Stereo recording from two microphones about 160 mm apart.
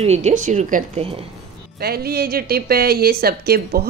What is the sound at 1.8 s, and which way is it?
A woman's voice, 75° right (ahead or behind).